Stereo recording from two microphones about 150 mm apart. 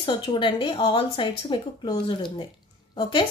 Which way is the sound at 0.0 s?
35° left (ahead or behind).